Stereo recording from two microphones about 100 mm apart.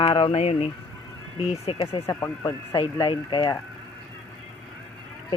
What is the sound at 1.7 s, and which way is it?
Speech, 65° left (ahead or behind).